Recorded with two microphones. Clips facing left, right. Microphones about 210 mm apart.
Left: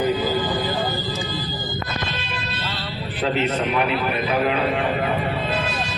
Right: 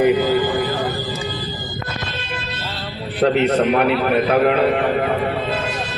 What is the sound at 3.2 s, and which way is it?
A man's voice, 60° right (ahead or behind).